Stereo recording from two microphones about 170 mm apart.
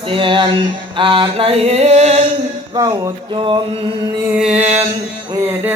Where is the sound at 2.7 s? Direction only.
20° right (ahead or behind).